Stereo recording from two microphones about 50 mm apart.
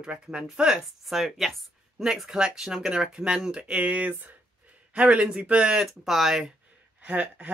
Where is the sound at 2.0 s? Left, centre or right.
Centre.